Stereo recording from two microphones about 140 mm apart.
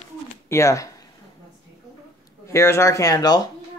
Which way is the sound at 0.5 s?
20° left (ahead or behind).